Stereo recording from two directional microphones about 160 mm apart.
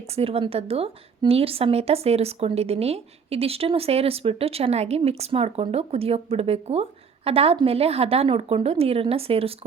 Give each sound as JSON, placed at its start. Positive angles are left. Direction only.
{"t": 0.2, "sound": "a woman's voice", "side_deg": -35}